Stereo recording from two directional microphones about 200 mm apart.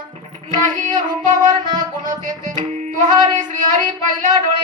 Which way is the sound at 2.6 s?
40° right (ahead or behind).